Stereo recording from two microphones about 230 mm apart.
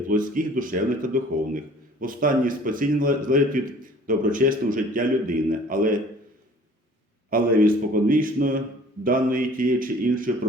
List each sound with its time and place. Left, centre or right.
0.1 s a man's voice: right
7.3 s a man's voice: right